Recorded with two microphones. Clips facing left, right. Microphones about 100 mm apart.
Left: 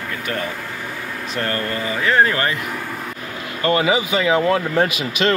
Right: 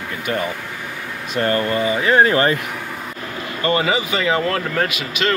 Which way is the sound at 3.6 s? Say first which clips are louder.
Left 1 dB; 5° left (ahead or behind).